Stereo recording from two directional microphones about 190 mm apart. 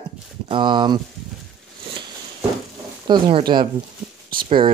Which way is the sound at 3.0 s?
25° right (ahead or behind).